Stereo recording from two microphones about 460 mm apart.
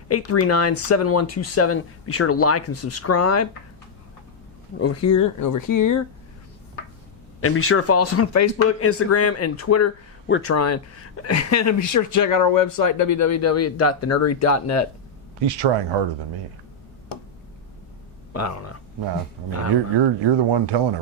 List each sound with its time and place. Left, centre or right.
0.1 s speech: left
4.8 s speech: left
7.4 s speech: left
15.4 s speech: right
18.3 s speech: left
20.0 s speech: right